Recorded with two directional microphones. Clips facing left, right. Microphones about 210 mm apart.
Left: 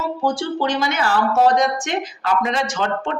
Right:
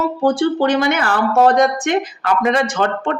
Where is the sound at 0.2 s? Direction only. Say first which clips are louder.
Right 7 dB; 55° right (ahead or behind).